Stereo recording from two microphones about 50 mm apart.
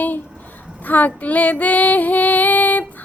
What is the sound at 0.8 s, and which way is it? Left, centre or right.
Child singing, left.